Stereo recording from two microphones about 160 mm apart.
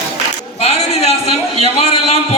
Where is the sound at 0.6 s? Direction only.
40° left (ahead or behind).